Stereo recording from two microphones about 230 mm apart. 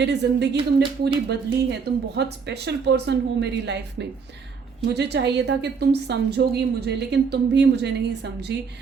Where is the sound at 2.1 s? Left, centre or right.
Right.